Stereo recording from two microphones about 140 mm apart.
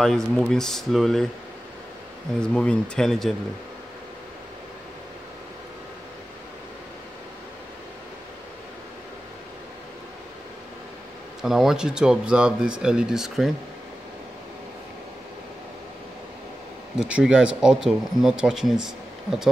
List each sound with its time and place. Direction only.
0.0 s speech: 5° left (ahead or behind)
2.4 s speech: 5° left (ahead or behind)
11.4 s speech: 5° right (ahead or behind)
17.0 s speech: 5° right (ahead or behind)